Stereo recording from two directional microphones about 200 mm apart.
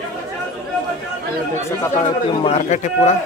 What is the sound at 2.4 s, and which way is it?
Speech, 35° left (ahead or behind).